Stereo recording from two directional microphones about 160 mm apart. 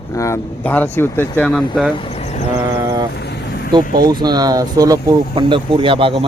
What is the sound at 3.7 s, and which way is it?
Speech, 25° right (ahead or behind).